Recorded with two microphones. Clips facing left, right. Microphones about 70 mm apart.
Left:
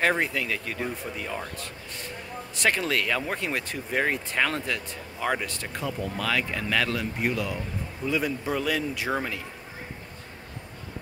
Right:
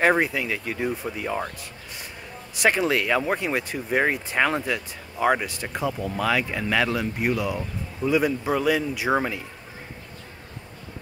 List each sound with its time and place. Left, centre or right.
0.0 s speech: centre